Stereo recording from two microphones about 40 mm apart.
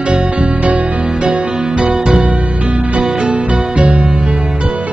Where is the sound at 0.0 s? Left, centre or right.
Right.